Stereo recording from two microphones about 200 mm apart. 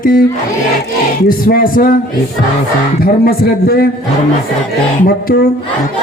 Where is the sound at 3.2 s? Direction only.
50° left (ahead or behind).